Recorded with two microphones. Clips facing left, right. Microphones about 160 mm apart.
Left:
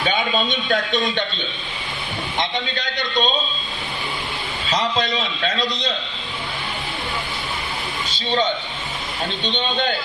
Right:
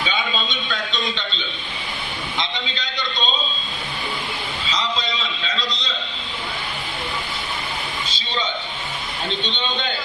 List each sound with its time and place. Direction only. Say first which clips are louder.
0.1 s a man's voice: left 4 dB; 50° left (ahead or behind)
4.7 s a man's voice: left 5 dB; 55° left (ahead or behind)